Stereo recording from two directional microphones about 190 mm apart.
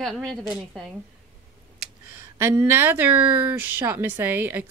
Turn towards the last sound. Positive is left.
turn(degrees=-10)  # may be behind; listen again after turning